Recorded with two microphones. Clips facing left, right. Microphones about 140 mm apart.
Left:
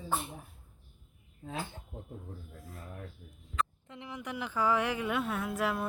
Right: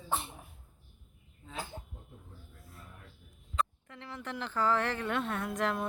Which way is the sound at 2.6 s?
90° left.